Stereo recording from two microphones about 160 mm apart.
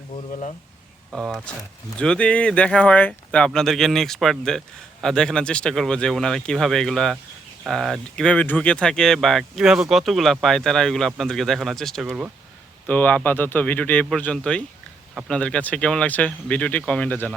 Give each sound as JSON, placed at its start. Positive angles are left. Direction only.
{"t": 0.3, "sound": "speech", "side_deg": 45}
{"t": 1.1, "sound": "speech", "side_deg": 0}